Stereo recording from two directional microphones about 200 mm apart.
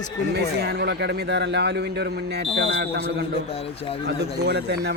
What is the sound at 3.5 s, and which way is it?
Speech, 30° left (ahead or behind).